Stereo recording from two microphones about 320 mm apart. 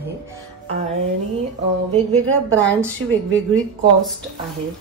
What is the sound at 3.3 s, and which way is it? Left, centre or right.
Speech, centre.